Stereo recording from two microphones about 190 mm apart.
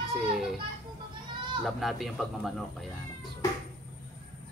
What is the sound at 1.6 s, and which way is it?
Speech, centre (ahead or behind).